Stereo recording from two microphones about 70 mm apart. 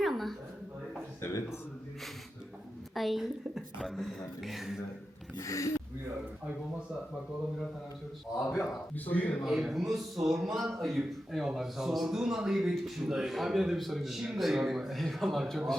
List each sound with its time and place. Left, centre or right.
0.0 s a sound: centre
2.9 s a woman's voice: centre
5.4 s speech: left
8.4 s a man's voice: centre
9.0 s speech: left
9.4 s a man's voice: centre